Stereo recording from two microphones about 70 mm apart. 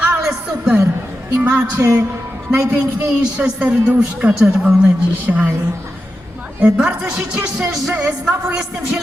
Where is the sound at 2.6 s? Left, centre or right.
Right.